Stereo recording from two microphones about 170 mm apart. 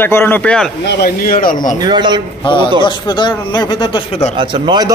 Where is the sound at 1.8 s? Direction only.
25° right (ahead or behind).